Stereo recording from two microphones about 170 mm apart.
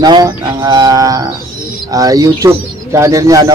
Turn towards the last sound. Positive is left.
turn(degrees=-20)  # may be behind; listen again after turning